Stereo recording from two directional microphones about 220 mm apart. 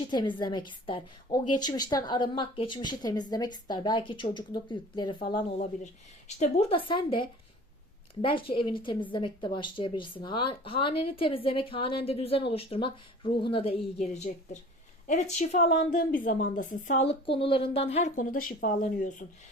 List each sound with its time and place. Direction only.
0.1 s speech: 20° left (ahead or behind)
5.5 s a woman's voice: 35° left (ahead or behind)